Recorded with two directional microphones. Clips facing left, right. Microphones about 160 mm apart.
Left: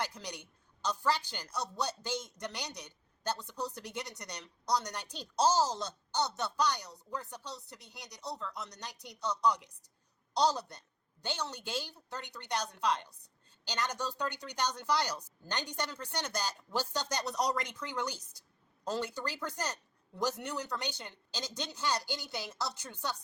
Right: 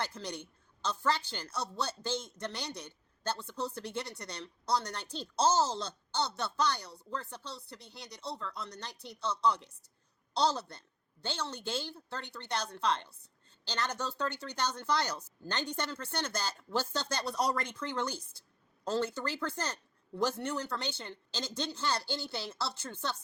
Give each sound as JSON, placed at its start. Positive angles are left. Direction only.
{"t": 0.0, "sound": "a woman's voice", "side_deg": 15}